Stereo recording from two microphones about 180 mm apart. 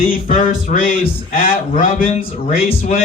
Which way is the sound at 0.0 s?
55° left (ahead or behind).